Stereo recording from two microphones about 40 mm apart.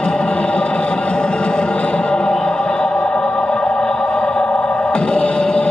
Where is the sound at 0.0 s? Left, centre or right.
Left.